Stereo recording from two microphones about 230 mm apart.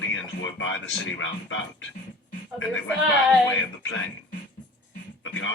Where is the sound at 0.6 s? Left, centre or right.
Left.